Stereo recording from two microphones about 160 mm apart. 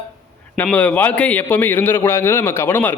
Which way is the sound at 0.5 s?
10° left (ahead or behind).